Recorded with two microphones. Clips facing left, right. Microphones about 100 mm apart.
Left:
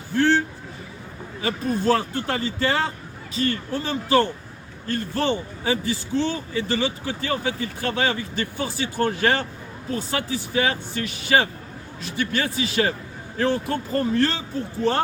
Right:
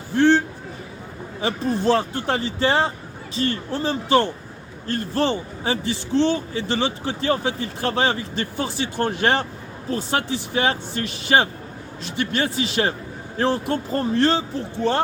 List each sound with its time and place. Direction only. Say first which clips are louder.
1.4 s a man's voice: right 2 dB; 25° right (ahead or behind)